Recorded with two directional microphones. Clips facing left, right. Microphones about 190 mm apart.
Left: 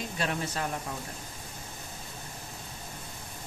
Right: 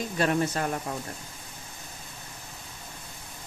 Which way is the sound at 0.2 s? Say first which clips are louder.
Right 7 dB; 50° right (ahead or behind).